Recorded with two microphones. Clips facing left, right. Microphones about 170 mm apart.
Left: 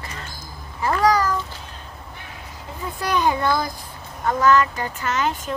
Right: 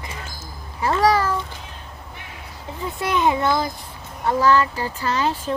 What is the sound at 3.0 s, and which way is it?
A child's voice, 25° right (ahead or behind).